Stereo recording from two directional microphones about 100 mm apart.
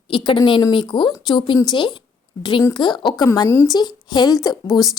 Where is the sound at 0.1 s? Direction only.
55° left (ahead or behind).